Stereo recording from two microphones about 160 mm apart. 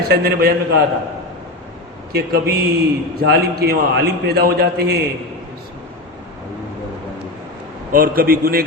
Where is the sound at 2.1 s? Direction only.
80° right.